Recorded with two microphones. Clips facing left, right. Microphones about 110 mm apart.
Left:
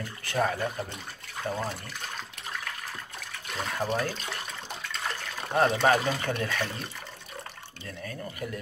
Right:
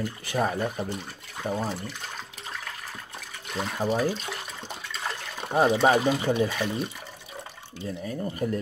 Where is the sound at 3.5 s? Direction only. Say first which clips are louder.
Right 3 dB; 5° right (ahead or behind).